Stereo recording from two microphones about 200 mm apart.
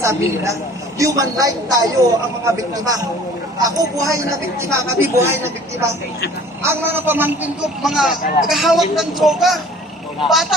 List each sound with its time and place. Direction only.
0.0 s a woman's voice: 15° right (ahead or behind)
3.6 s a woman's voice: 15° right (ahead or behind); by 10.5 s centre (ahead or behind)